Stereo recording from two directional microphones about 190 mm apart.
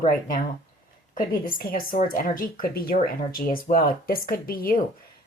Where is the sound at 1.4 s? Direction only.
50° left (ahead or behind).